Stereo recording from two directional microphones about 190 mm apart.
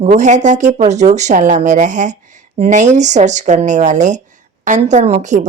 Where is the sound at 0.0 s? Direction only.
40° right (ahead or behind).